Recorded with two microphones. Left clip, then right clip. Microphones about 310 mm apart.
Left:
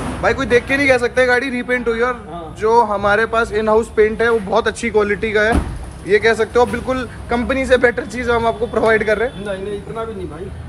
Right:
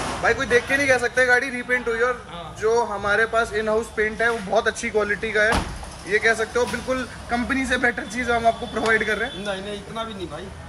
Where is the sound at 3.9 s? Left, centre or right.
Left.